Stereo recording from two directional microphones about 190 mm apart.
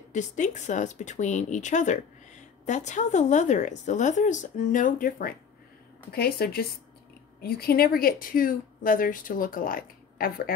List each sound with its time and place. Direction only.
0.1 s a woman's voice: 40° left (ahead or behind)